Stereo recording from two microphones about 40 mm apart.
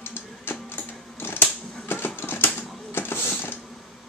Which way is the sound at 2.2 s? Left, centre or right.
Left.